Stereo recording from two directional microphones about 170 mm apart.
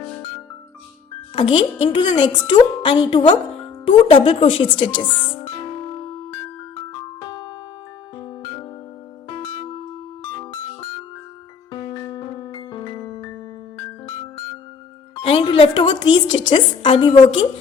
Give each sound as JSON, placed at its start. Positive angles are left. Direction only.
{"t": 1.4, "sound": "speech", "side_deg": 30}
{"t": 3.8, "sound": "music", "side_deg": 30}
{"t": 9.3, "sound": "music", "side_deg": 30}
{"t": 11.7, "sound": "music", "side_deg": 25}
{"t": 15.1, "sound": "speech", "side_deg": 35}